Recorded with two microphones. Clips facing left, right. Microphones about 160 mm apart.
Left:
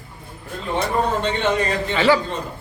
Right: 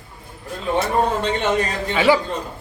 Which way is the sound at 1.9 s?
10° right (ahead or behind).